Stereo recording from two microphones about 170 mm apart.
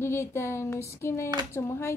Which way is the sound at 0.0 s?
15° left (ahead or behind).